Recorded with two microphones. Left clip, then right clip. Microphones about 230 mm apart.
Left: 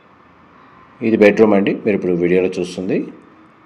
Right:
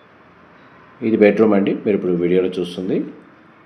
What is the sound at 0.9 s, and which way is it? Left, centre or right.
Speech, left.